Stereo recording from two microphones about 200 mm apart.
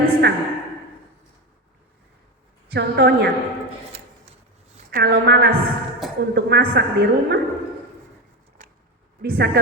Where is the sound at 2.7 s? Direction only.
50° right (ahead or behind).